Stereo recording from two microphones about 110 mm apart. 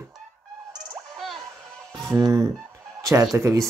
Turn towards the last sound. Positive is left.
turn(degrees=-30)  # may be behind; listen again after turning